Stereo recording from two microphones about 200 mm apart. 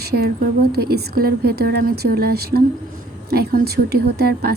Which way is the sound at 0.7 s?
50° right (ahead or behind).